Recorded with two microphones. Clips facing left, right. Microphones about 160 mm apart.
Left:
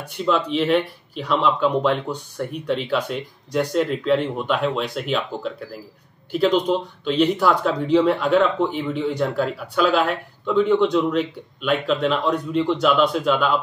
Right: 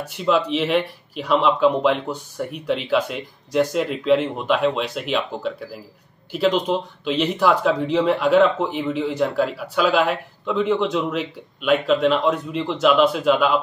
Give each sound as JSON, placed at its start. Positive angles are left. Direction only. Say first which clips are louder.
{"t": 0.0, "sound": "speech", "louder": "right 1 dB", "side_deg": -5}